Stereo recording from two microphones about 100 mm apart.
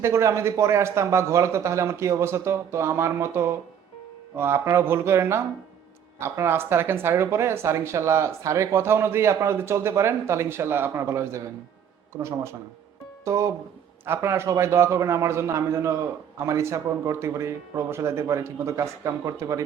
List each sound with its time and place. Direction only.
0.0 s speech: 30° right (ahead or behind)